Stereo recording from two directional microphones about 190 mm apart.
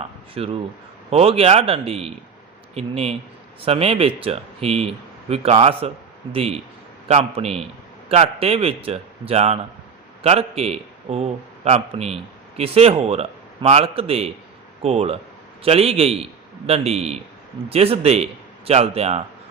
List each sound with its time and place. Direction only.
0.0 s a man's voice: 30° right (ahead or behind)